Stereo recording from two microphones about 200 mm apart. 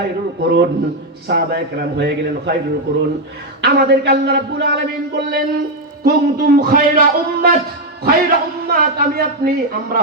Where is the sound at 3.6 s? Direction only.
55° right (ahead or behind).